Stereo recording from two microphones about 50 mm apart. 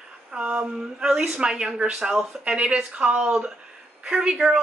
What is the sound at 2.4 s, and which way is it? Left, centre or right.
Speech, right.